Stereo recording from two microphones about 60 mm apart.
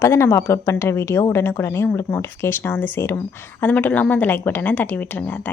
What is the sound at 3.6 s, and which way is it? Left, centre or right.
A woman's voice, left.